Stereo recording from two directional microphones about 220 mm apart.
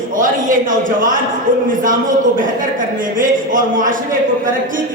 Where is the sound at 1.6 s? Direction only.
35° right (ahead or behind).